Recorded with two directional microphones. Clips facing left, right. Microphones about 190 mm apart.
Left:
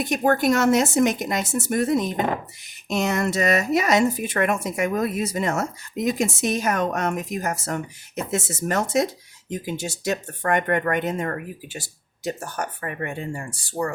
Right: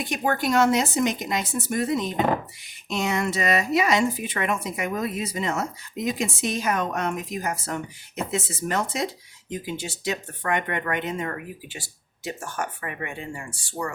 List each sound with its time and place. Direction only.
0.0 s speech: 45° left (ahead or behind)